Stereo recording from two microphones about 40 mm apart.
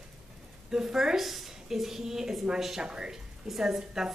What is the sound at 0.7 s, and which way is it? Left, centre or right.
A woman's voice, centre.